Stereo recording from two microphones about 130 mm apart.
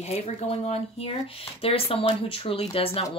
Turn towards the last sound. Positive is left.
turn(degrees=50)  # may be behind; listen again after turning